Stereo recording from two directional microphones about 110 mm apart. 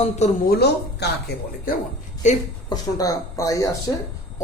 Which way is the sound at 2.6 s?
35° left (ahead or behind).